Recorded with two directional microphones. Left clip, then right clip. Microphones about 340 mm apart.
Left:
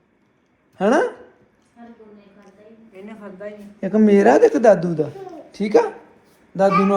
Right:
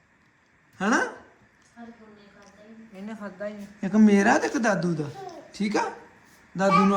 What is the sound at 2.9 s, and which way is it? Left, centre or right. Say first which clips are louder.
Speech: left 1 dB; right.